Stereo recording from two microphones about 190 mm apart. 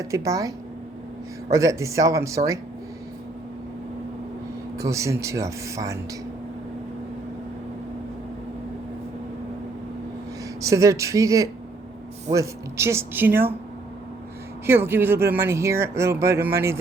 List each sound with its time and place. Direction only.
0.0 s speech: 20° right (ahead or behind)
4.8 s speech: 15° right (ahead or behind)
10.6 s speech: 15° right (ahead or behind)
14.7 s speech: 10° right (ahead or behind)